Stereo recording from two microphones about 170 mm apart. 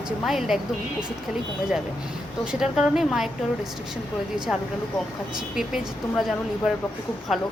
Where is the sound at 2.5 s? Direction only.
5° right (ahead or behind).